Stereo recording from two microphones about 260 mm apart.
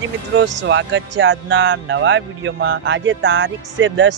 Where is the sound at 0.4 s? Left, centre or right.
Right.